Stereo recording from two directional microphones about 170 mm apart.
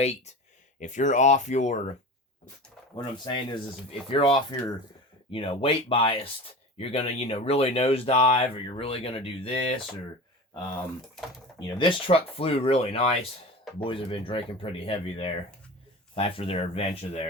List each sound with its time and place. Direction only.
0.8 s speech: 45° left (ahead or behind)
2.9 s speech: 25° left (ahead or behind)
11.6 s speech: 30° left (ahead or behind)